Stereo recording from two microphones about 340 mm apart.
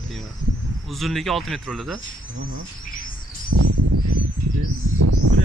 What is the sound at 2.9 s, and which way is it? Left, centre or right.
Bird, left.